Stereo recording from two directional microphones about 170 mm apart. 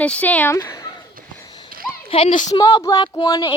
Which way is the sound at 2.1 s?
35° left (ahead or behind).